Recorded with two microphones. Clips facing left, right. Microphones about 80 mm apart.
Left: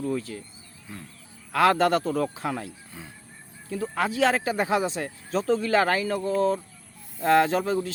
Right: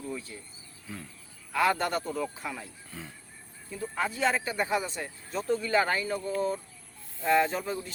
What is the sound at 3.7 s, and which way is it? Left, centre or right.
Speech, left.